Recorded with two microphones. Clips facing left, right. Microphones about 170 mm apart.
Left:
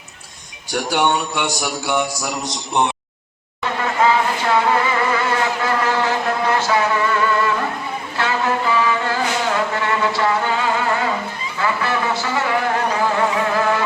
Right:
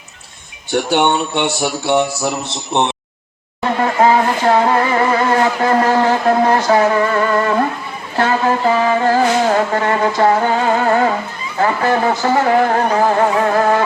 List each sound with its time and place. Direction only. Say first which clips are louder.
0.7 s speech: right 4 dB; 25° right (ahead or behind)
3.6 s music: right 5 dB; 40° right (ahead or behind)
11.5 s a sound: right 6 dB; 45° right (ahead or behind)